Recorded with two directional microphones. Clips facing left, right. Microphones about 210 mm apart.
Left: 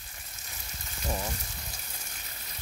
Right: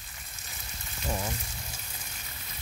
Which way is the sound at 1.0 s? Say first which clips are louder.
Right 1 dB; centre (ahead or behind).